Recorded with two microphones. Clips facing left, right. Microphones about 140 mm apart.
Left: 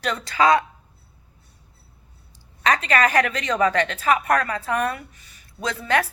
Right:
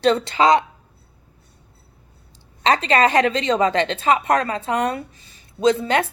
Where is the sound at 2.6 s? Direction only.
25° right (ahead or behind).